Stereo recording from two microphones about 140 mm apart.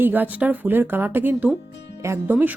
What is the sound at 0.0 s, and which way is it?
Speech, 15° right (ahead or behind).